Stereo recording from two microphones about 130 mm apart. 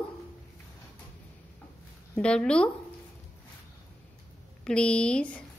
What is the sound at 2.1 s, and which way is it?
Speech, 10° left (ahead or behind).